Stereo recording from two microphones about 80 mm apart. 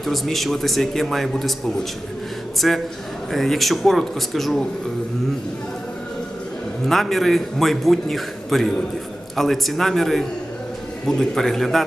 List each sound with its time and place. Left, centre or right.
0.0 s a man's voice: centre
6.8 s a man's voice: centre